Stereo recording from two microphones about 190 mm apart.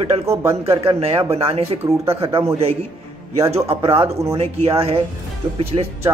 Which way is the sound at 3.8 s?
30° right (ahead or behind).